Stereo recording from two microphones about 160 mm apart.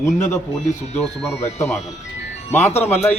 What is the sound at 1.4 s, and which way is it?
Speech, 45° left (ahead or behind).